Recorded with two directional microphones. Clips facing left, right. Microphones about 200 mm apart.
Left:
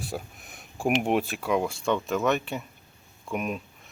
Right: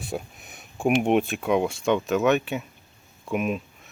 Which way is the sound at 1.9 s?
5° right (ahead or behind).